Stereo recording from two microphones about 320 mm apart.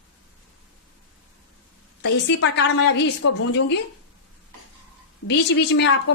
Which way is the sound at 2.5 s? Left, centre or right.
Left.